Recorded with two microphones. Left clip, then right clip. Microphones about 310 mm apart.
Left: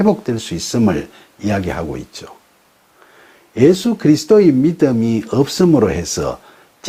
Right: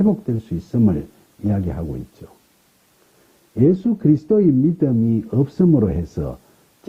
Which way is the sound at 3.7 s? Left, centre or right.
Centre.